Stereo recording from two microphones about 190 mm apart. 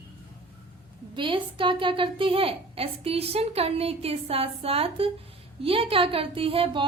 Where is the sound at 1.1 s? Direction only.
25° right (ahead or behind).